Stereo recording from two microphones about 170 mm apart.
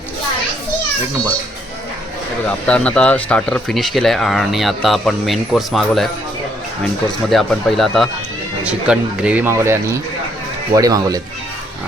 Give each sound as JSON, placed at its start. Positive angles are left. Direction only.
{"t": 2.5, "sound": "speech", "side_deg": 5}